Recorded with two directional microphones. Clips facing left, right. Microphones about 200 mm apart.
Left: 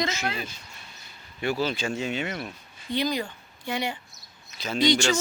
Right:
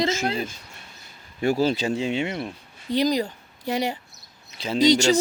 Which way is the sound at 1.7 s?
30° right (ahead or behind).